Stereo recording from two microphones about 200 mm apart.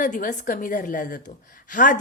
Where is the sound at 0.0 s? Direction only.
40° left (ahead or behind).